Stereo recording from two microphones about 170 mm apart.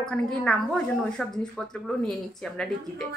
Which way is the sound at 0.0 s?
5° left (ahead or behind).